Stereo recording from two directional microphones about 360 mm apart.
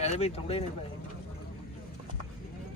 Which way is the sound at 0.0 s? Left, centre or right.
Centre.